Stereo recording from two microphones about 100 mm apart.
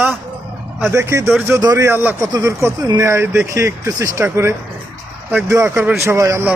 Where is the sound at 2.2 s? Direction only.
30° right (ahead or behind).